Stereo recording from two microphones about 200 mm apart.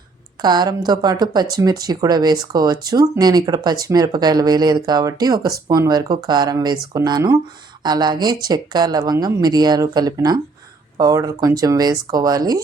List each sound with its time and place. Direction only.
0.4 s speech: 20° right (ahead or behind)